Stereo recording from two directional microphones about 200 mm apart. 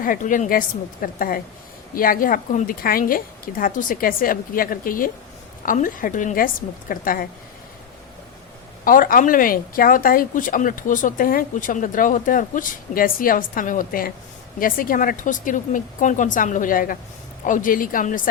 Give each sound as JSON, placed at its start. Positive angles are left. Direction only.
{"t": 0.0, "sound": "speech", "side_deg": 40}
{"t": 8.8, "sound": "speech", "side_deg": 45}